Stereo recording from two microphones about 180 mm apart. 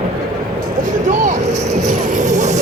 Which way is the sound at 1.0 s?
45° right (ahead or behind).